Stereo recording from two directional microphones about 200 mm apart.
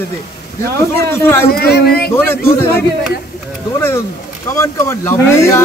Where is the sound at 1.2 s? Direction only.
10° left (ahead or behind).